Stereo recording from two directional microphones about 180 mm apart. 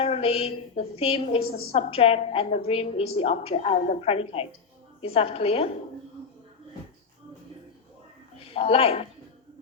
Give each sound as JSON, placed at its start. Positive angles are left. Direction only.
{"t": 0.0, "sound": "a woman's voice", "side_deg": 35}
{"t": 8.5, "sound": "a woman's voice", "side_deg": 35}